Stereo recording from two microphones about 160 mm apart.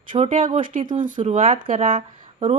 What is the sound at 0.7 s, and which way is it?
Speech, 55° right (ahead or behind).